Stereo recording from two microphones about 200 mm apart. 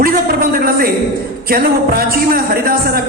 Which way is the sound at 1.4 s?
45° right (ahead or behind).